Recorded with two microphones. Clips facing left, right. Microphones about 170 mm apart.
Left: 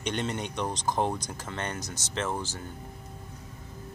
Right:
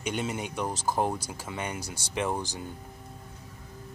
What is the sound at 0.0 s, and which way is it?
Speech, 5° right (ahead or behind).